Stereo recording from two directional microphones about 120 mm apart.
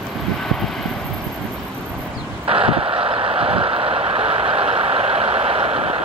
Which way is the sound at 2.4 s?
50° right (ahead or behind).